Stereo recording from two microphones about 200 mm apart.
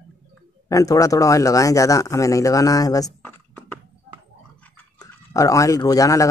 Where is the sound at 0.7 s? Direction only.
15° left (ahead or behind).